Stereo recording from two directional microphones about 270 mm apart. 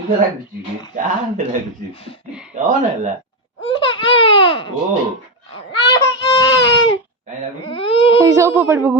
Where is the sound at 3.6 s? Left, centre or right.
Centre.